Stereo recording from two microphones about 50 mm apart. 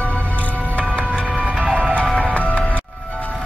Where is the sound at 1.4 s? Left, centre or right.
Right.